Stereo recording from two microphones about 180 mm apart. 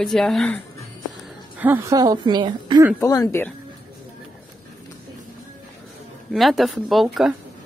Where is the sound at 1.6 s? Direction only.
10° right (ahead or behind).